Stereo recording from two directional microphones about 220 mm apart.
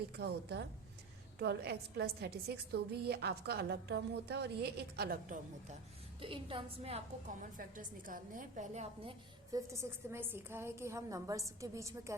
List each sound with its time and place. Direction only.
0.2 s a woman's voice: 50° right (ahead or behind)
6.1 s a woman's voice: 25° right (ahead or behind)
7.5 s a woman's voice: 40° right (ahead or behind)
9.5 s a woman's voice: 15° right (ahead or behind)